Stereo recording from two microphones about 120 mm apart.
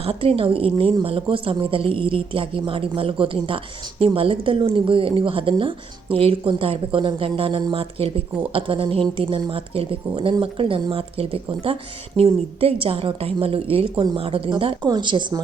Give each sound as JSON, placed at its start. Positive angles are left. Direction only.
{"t": 0.0, "sound": "speech", "side_deg": -50}